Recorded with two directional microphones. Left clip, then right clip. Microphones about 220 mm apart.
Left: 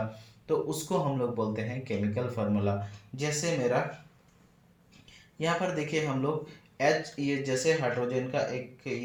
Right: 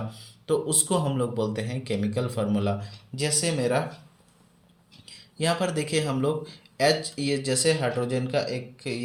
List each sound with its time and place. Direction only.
0.4 s speech: 45° right (ahead or behind)
5.4 s speech: 45° right (ahead or behind)